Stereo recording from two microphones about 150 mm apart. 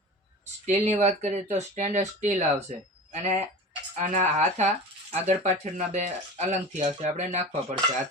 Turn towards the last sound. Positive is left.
turn(degrees=-50)  # may be behind; listen again after turning